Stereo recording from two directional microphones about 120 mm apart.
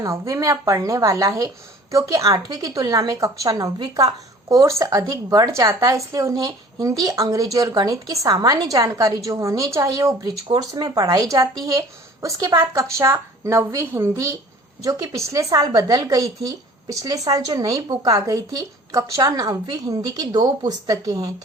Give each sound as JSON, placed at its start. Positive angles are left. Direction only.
{"t": 0.0, "sound": "a woman's voice", "side_deg": -25}